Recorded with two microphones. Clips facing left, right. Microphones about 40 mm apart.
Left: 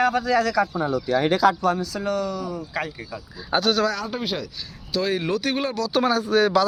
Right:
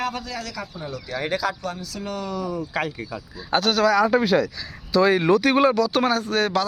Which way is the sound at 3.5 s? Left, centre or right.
Right.